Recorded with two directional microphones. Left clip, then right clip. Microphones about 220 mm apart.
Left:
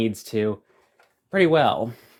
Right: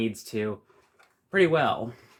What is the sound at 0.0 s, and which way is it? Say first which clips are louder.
Speech: left 6 dB; 40° left (ahead or behind).